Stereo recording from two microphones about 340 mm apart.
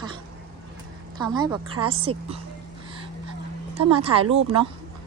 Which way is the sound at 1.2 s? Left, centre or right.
Centre.